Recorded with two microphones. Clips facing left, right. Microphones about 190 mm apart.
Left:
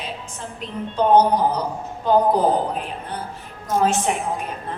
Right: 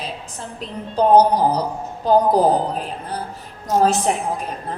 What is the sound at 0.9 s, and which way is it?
Speech, 35° right (ahead or behind).